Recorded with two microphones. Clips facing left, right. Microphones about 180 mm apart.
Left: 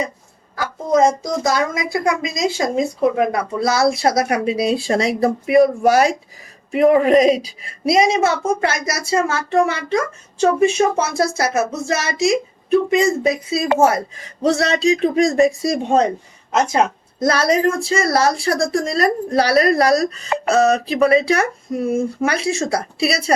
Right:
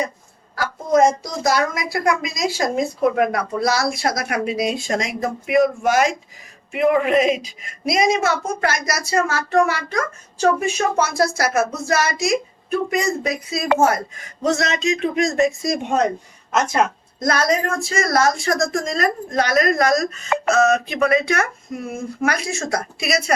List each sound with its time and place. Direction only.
1.5 s a woman's voice: 20° left (ahead or behind)